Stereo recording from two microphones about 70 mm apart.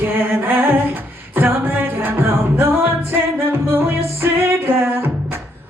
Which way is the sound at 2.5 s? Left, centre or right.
Right.